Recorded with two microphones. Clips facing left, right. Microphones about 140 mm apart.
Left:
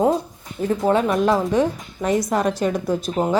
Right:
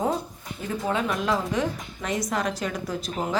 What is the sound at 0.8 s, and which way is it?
Speech, 45° left (ahead or behind).